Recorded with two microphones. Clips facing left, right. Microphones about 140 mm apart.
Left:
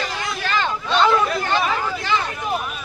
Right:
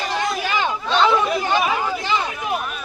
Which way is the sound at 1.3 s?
15° right (ahead or behind).